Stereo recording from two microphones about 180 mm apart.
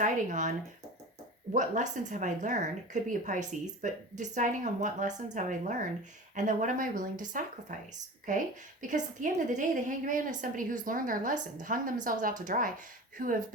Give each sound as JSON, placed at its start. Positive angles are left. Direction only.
{"t": 0.0, "sound": "a woman's voice", "side_deg": -40}
{"t": 1.5, "sound": "a woman's voice", "side_deg": -45}
{"t": 8.9, "sound": "a woman's voice", "side_deg": -45}